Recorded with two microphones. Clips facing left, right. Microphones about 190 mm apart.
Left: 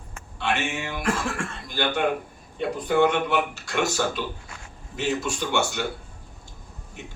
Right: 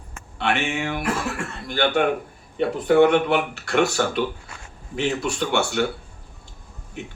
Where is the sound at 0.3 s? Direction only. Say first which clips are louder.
Right 3 dB; 65° right (ahead or behind).